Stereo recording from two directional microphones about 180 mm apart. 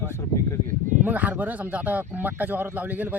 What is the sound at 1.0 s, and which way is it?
A man's voice, 10° right (ahead or behind).